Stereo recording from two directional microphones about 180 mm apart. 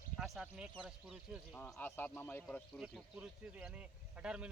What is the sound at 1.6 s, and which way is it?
Speech, 10° left (ahead or behind).